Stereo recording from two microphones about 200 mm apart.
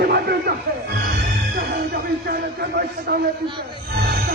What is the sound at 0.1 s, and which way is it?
Music, 55° right (ahead or behind).